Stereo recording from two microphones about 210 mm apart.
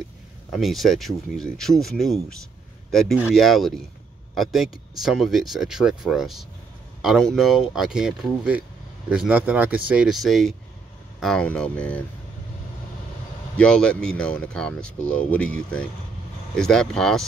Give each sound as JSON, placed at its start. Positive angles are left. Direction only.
{"t": 0.5, "sound": "speech", "side_deg": 0}
{"t": 13.6, "sound": "speech", "side_deg": 5}